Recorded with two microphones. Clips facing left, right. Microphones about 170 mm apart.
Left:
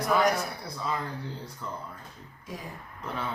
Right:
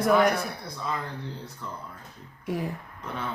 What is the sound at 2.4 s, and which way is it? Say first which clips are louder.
Speech: right 10 dB; 60° right (ahead or behind).